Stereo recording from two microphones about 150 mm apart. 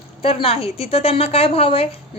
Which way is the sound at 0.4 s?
40° left (ahead or behind).